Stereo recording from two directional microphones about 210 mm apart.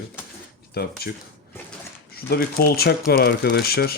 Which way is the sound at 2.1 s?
50° left (ahead or behind).